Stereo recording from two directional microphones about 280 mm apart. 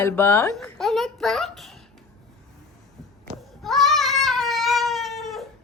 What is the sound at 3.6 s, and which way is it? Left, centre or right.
Cat, centre.